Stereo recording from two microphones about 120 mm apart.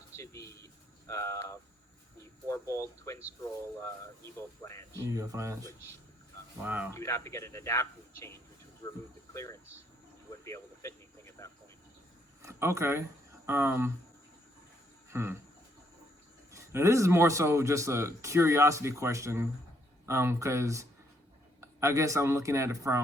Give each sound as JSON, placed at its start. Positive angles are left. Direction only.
{"t": 0.2, "sound": "a sound", "side_deg": 25}
{"t": 1.0, "sound": "speech", "side_deg": 25}
{"t": 4.4, "sound": "speech", "side_deg": 25}
{"t": 5.0, "sound": "a man's voice", "side_deg": -25}
{"t": 6.6, "sound": "speech", "side_deg": -15}
{"t": 6.9, "sound": "speech", "side_deg": 25}
{"t": 12.4, "sound": "a man's voice", "side_deg": -25}
{"t": 15.1, "sound": "a sound", "side_deg": -20}
{"t": 16.5, "sound": "a man's voice", "side_deg": -25}